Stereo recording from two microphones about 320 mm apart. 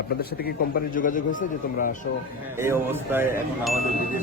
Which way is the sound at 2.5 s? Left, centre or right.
Centre.